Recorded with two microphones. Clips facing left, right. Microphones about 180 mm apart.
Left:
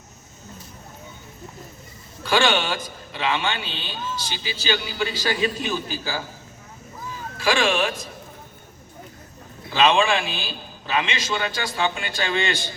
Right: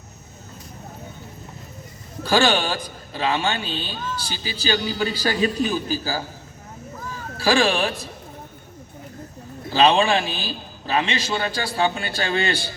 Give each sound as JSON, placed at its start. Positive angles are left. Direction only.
{"t": 2.2, "sound": "a man's voice", "side_deg": -40}
{"t": 7.3, "sound": "a man's voice", "side_deg": -35}
{"t": 9.6, "sound": "a man's voice", "side_deg": -35}